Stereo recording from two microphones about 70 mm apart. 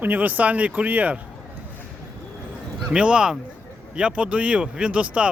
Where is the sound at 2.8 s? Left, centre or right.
Centre.